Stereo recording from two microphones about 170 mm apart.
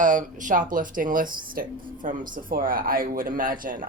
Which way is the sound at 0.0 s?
50° right (ahead or behind).